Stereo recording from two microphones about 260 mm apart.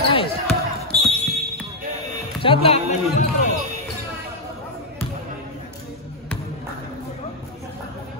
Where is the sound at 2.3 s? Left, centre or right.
Left.